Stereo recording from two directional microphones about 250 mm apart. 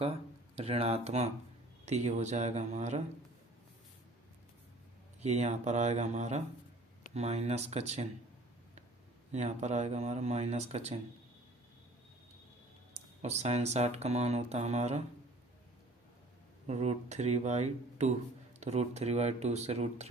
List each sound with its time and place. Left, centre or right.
0.0 s speech: right
5.2 s speech: right
9.3 s speech: right
13.2 s speech: right
16.6 s speech: right